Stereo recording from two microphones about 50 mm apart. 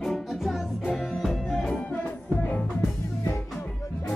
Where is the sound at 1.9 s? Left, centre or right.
Left.